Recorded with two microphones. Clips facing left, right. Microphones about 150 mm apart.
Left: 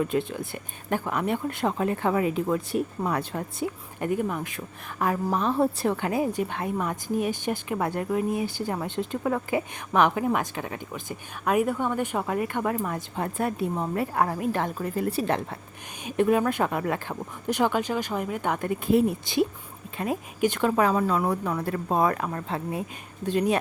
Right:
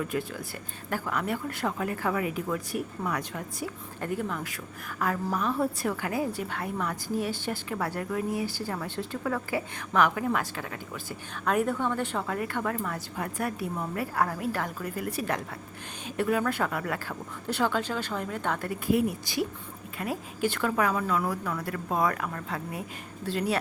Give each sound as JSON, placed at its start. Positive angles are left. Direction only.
{"t": 0.0, "sound": "a woman's voice", "side_deg": 25}
{"t": 4.0, "sound": "a woman's voice", "side_deg": 20}